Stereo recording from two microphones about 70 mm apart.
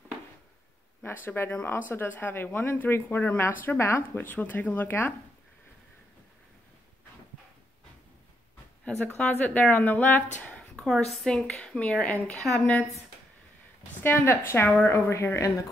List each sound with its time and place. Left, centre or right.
1.0 s speech: left
9.1 s speech: left
14.0 s a woman's voice: left